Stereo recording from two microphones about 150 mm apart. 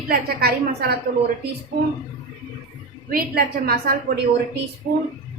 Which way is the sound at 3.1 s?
90° right.